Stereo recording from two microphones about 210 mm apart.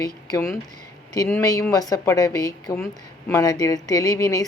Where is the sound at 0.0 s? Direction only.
15° left (ahead or behind).